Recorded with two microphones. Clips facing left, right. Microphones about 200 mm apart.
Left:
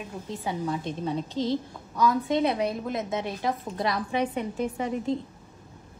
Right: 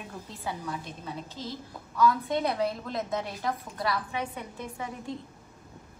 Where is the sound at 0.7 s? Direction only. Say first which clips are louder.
Left 8 dB; 30° left (ahead or behind).